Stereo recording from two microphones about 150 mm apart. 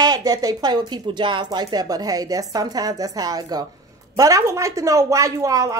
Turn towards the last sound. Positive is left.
turn(degrees=-20)  # may be behind; listen again after turning